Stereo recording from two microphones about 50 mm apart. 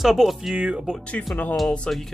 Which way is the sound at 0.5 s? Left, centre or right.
Right.